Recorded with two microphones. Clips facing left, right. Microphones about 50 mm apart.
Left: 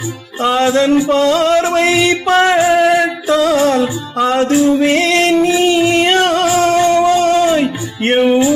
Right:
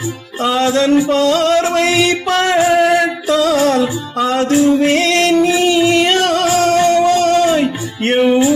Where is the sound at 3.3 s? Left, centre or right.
Left.